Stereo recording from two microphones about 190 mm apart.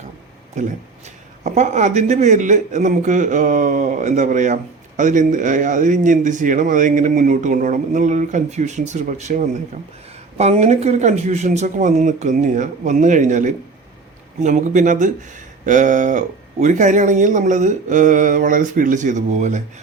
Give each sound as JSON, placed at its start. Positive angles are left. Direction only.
{"t": 1.5, "sound": "speech", "side_deg": -40}